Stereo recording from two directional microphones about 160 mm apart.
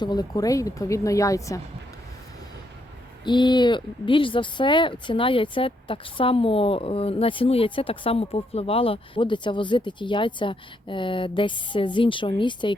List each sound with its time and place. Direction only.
0.0 s a woman's voice: 25° left (ahead or behind)
3.2 s speech: 30° left (ahead or behind)